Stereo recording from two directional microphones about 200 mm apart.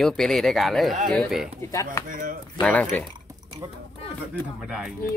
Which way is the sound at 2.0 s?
45° right (ahead or behind).